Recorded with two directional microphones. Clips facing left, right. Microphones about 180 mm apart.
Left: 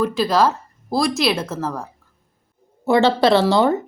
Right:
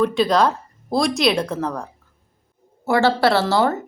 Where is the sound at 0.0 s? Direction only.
Centre (ahead or behind).